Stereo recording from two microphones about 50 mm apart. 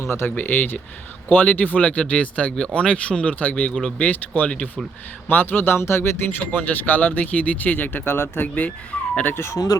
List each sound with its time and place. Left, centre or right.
0.0 s speech: left
0.3 s speech: left
5.3 s speech: left
8.5 s speech: left
9.3 s speech: left